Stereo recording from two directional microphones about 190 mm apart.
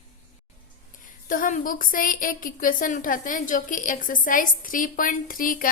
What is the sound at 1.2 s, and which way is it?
A woman's voice, 45° left (ahead or behind).